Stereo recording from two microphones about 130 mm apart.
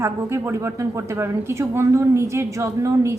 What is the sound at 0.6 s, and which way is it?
A woman's voice, 20° right (ahead or behind).